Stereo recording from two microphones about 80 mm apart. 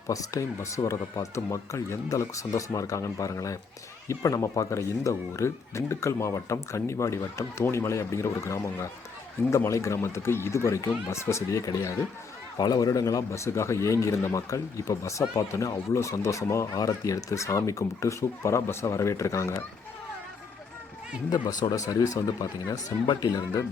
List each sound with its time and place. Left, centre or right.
0.1 s speech: left
12.5 s speech: left
21.2 s speech: left